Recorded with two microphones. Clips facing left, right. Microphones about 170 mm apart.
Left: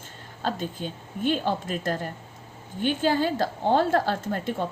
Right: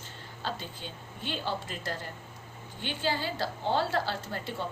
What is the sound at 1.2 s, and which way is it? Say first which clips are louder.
A woman's voice: left 9 dB; 50° left (ahead or behind).